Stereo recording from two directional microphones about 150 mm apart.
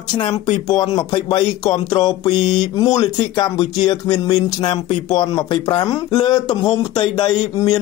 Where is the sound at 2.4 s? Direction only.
50° left (ahead or behind).